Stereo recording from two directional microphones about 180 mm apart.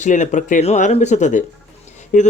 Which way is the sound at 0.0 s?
45° left (ahead or behind).